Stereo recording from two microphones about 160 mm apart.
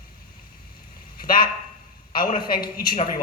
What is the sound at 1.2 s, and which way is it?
A man's voice, 65° left (ahead or behind).